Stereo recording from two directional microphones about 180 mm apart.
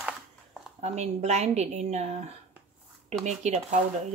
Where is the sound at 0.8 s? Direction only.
40° right (ahead or behind).